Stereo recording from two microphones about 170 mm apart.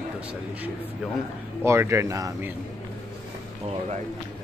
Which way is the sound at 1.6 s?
15° right (ahead or behind).